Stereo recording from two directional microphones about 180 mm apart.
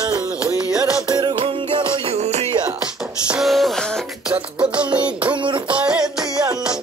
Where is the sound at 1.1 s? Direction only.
25° right (ahead or behind).